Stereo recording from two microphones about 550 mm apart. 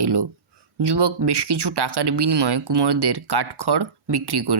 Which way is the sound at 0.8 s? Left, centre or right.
Right.